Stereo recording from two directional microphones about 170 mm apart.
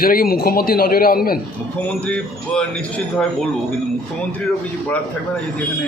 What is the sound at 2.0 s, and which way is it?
A man's voice, 5° left (ahead or behind).